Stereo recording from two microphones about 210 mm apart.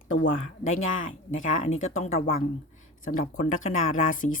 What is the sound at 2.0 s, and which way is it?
Speech, 35° left (ahead or behind).